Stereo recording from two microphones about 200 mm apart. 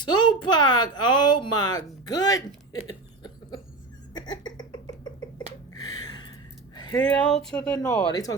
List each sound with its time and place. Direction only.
0.0 s a woman's voice: 20° left (ahead or behind)
2.8 s a sound: 20° left (ahead or behind)
4.1 s cough: 20° left (ahead or behind)
5.7 s a sound: 20° left (ahead or behind)
7.0 s speech: 5° left (ahead or behind)
8.1 s speech: 15° left (ahead or behind)